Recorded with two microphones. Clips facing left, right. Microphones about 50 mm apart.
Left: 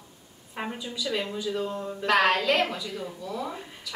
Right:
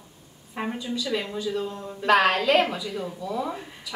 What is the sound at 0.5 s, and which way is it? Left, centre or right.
A woman's voice, centre.